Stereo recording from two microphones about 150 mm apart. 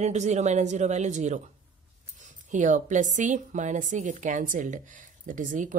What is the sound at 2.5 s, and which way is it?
A woman's voice, 55° right (ahead or behind).